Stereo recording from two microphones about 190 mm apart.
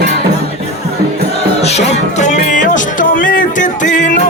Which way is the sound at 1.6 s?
35° left (ahead or behind).